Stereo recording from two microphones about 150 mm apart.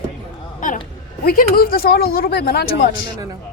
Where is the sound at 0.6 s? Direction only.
60° left (ahead or behind).